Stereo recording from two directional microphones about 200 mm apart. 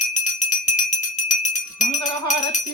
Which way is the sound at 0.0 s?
40° left (ahead or behind).